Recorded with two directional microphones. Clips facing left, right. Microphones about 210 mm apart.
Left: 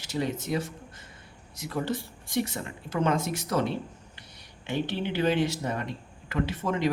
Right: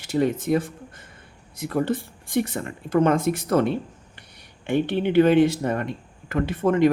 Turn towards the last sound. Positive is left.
turn(degrees=-55)  # may be behind; listen again after turning